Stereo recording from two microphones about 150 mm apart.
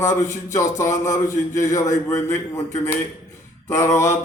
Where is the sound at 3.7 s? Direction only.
20° left (ahead or behind).